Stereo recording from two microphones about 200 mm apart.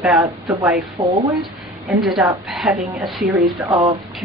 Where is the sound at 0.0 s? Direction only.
5° right (ahead or behind).